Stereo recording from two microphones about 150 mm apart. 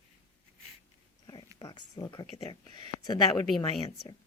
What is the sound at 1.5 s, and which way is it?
Speech, 25° left (ahead or behind).